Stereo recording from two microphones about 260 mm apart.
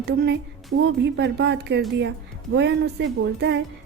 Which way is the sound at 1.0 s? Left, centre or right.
Right.